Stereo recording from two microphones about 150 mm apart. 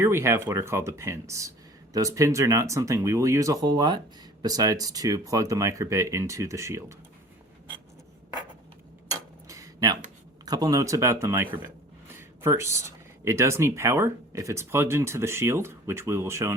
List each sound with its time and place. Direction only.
0.0 s speech: 15° right (ahead or behind)
9.0 s tick-tock: 20° right (ahead or behind)
10.4 s speech: 25° right (ahead or behind)